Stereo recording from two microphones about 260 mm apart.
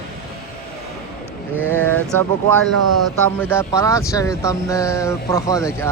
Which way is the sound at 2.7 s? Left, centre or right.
Right.